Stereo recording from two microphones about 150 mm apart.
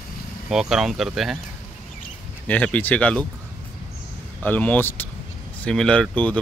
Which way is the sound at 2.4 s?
10° left (ahead or behind).